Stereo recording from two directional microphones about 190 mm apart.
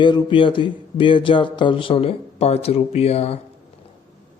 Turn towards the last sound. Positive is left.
turn(degrees=35)  # may be behind; listen again after turning